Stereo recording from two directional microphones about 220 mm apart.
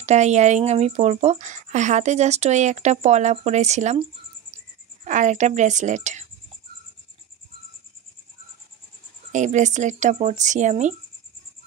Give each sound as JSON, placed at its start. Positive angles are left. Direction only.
{"t": 0.0, "sound": "speech", "side_deg": -30}
{"t": 9.3, "sound": "speech", "side_deg": -35}